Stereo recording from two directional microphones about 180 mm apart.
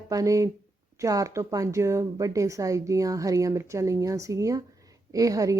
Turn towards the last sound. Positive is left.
turn(degrees=-20)  # may be behind; listen again after turning